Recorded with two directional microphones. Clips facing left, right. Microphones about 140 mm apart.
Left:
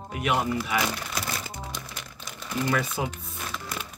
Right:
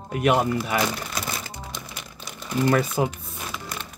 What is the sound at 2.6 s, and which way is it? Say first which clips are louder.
Speech: right 7 dB; 40° right (ahead or behind).